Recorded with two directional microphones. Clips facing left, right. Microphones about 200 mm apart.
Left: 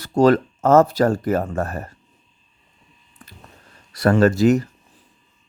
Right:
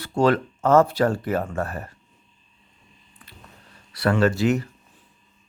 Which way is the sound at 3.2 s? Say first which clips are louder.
Left 5 dB; 45° left (ahead or behind).